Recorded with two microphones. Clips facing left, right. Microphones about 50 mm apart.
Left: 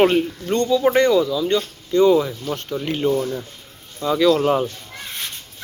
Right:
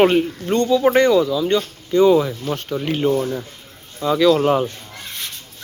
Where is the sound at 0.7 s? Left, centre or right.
Right.